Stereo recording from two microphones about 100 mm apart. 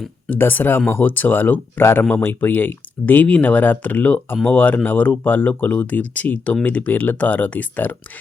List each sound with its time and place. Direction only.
0.3 s speech: 20° left (ahead or behind)